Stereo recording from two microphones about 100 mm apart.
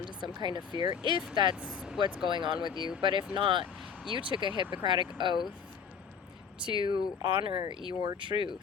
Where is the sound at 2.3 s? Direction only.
55° right (ahead or behind).